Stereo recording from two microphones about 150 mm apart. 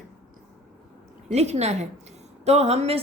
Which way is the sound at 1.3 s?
45° right (ahead or behind).